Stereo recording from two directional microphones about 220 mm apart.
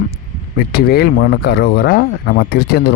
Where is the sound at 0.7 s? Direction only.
45° left (ahead or behind).